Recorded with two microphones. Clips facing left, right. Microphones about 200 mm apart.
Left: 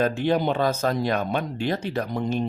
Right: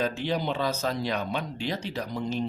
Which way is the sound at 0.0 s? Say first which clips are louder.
Left 6 dB; 55° left (ahead or behind).